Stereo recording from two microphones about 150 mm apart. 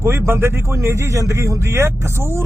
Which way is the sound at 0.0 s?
15° right (ahead or behind).